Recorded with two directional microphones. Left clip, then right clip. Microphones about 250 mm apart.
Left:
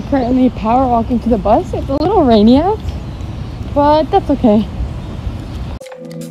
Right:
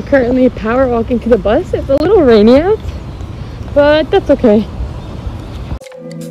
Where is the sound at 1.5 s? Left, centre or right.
Centre.